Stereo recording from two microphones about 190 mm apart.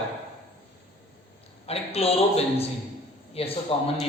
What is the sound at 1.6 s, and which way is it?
A woman's voice, 30° left (ahead or behind).